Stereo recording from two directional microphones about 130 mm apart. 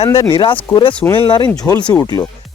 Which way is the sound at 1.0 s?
15° left (ahead or behind).